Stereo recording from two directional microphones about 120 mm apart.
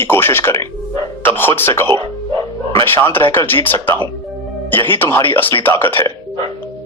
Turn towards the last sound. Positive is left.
turn(degrees=20)  # may be behind; listen again after turning